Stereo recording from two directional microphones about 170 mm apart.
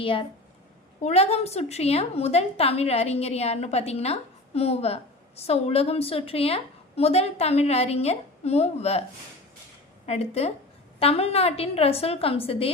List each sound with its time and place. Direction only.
0.0 s a woman's voice: 30° left (ahead or behind)
10.1 s a woman's voice: 35° left (ahead or behind)